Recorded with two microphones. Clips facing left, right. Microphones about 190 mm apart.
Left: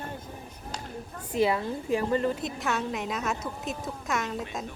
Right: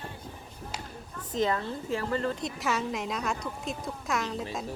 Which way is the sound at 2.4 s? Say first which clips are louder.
Even; centre (ahead or behind).